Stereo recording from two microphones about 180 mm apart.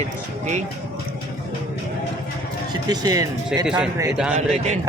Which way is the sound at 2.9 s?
20° right (ahead or behind).